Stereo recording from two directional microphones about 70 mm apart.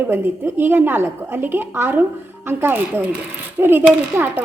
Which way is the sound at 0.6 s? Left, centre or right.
Right.